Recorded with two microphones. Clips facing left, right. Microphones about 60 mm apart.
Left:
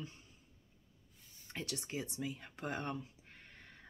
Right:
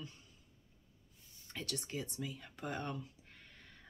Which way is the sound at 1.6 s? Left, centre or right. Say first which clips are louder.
Even; centre.